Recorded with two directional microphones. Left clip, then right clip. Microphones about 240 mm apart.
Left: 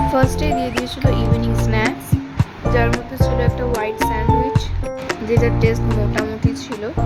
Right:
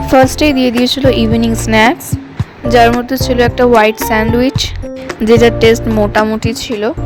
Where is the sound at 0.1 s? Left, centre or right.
Right.